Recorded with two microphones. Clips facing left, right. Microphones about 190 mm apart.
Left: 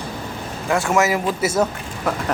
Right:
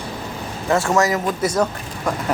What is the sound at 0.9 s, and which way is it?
A man's voice, 15° left (ahead or behind).